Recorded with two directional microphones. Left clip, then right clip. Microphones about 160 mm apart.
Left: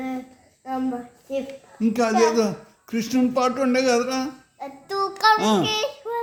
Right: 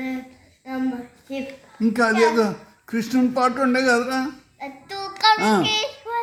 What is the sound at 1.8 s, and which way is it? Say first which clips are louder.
Speech: right 1 dB; 25° left (ahead or behind).